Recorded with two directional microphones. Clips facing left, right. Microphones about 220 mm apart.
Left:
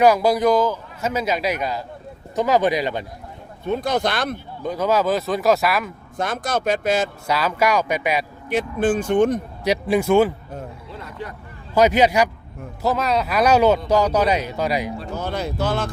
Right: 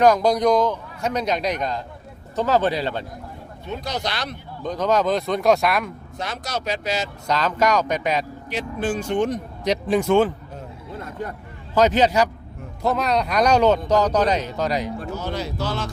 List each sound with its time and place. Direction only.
0.0 s a man's voice: 10° left (ahead or behind)
3.7 s speech: 50° left (ahead or behind)
4.6 s a man's voice: 10° left (ahead or behind)
6.1 s speech: 50° left (ahead or behind)
7.3 s speech: 10° left (ahead or behind)
8.4 s speech: 50° left (ahead or behind)
9.6 s speech: 10° left (ahead or behind)
10.9 s a sound: 50° right (ahead or behind)
11.7 s speech: 10° left (ahead or behind)
12.8 s speech: centre (ahead or behind)
15.1 s speech: 55° left (ahead or behind)